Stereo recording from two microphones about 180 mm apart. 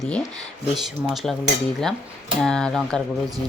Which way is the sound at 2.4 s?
5° left (ahead or behind).